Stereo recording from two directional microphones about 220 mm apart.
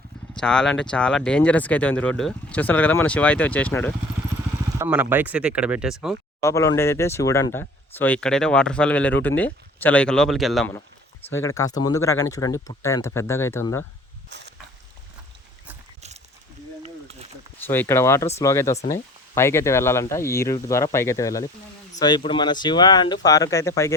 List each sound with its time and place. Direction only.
0.3 s speech: 5° left (ahead or behind)
4.8 s speech: 10° right (ahead or behind)
6.4 s speech: 15° left (ahead or behind)
11.3 s speech: 15° left (ahead or behind)
14.3 s a sound: 50° right (ahead or behind)
17.7 s speech: 10° left (ahead or behind)